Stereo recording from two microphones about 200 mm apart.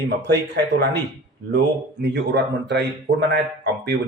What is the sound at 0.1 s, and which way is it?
Speech, 60° right (ahead or behind).